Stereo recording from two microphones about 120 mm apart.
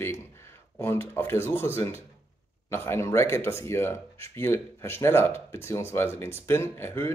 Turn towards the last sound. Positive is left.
turn(degrees=20)  # may be behind; listen again after turning